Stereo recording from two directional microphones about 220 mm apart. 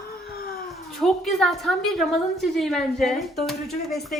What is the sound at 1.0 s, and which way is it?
A woman's voice, centre (ahead or behind).